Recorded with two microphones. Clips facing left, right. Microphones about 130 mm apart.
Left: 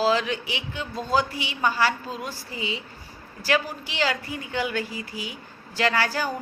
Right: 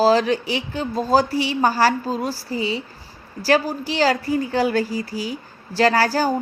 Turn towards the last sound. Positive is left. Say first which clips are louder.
# right 7 dB
turn(degrees=-35)  # may be behind; listen again after turning